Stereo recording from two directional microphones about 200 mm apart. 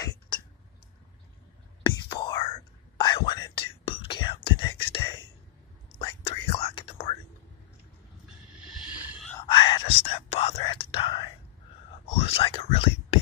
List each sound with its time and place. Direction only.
1.8 s whispering: 25° left (ahead or behind)
8.6 s a sound: 5° right (ahead or behind)
9.3 s whispering: 20° left (ahead or behind)